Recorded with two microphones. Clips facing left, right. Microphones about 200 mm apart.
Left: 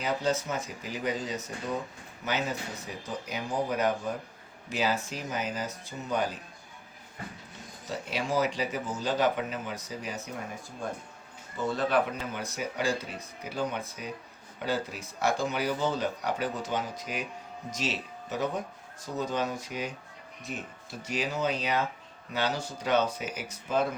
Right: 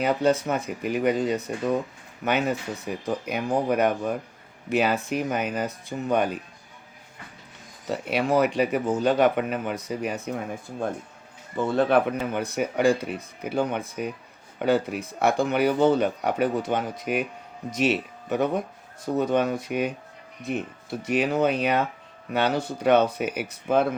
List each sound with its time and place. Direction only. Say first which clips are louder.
0.0 s speech: right 7 dB; 60° right (ahead or behind)
7.9 s speech: right 8 dB; 60° right (ahead or behind)
11.5 s speech: right 6 dB; 55° right (ahead or behind)
21.0 s speech: right 8 dB; 60° right (ahead or behind)